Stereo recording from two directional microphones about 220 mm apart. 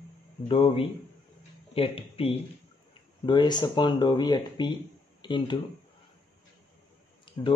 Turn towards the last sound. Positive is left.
turn(degrees=20)  # may be behind; listen again after turning